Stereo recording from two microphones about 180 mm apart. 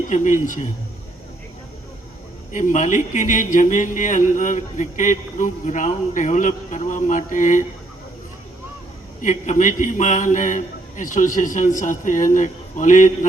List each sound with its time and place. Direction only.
0.1 s a man's voice: 45° left (ahead or behind)
2.5 s a man's voice: 45° left (ahead or behind)
9.2 s a man's voice: 45° left (ahead or behind)